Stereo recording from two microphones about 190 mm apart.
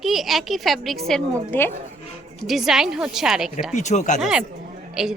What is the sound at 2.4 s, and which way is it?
A woman's voice, centre (ahead or behind).